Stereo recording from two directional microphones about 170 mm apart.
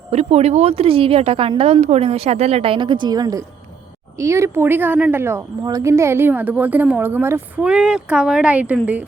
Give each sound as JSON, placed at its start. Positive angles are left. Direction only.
{"t": 0.1, "sound": "a woman's voice", "side_deg": -40}